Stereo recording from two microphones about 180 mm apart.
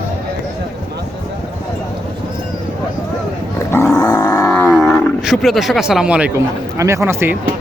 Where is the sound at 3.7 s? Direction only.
15° left (ahead or behind).